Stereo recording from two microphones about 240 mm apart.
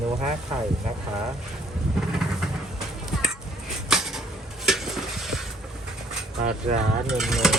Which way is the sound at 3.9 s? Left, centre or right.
Centre.